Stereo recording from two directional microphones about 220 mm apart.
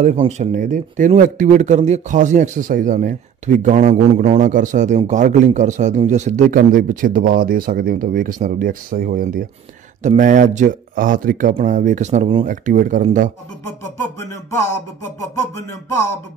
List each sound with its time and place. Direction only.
0.0 s speech: 30° right (ahead or behind)
14.1 s music: 15° left (ahead or behind)